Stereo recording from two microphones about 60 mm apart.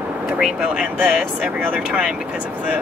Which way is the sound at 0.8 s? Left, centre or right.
Right.